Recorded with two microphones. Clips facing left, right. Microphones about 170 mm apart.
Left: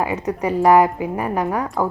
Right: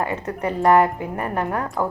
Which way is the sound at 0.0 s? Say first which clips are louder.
Left 3 dB; 10° left (ahead or behind).